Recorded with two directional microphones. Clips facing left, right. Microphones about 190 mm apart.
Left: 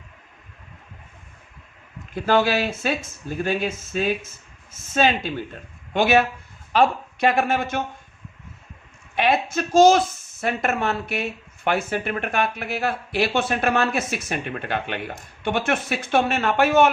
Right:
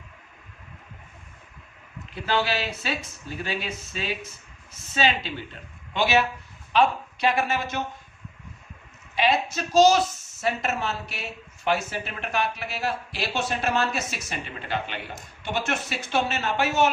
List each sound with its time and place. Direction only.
2.1 s speech: 50° left (ahead or behind)
9.1 s speech: 55° left (ahead or behind)